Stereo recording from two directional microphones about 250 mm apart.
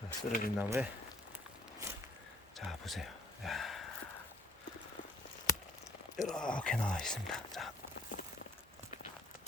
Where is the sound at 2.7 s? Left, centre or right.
Centre.